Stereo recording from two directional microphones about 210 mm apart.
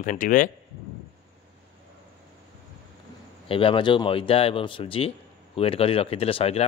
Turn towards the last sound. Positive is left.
turn(degrees=30)  # may be behind; listen again after turning